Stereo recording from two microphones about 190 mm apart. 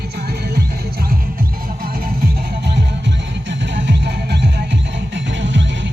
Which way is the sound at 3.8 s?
65° right (ahead or behind).